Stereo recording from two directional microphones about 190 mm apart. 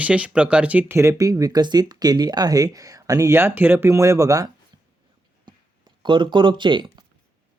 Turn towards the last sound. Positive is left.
turn(degrees=-25)  # may be behind; listen again after turning